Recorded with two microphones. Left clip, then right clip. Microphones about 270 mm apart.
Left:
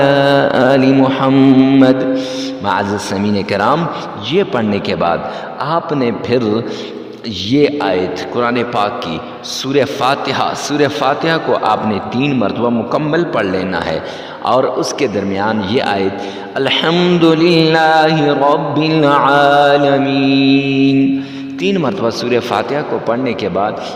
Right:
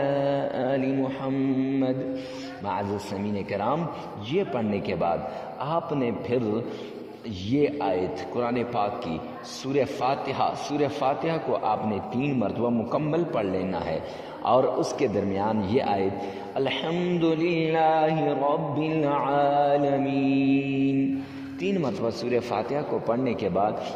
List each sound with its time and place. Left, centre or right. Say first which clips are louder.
0.0 s mantra: left 15 dB; left
14.4 s a man's voice: left 9 dB; left
16.6 s mantra: left 14 dB; left